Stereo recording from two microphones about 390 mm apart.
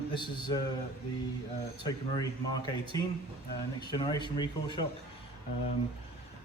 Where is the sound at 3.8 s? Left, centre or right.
Centre.